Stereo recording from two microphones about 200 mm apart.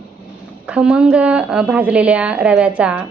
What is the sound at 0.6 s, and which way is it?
A woman's voice, 5° right (ahead or behind).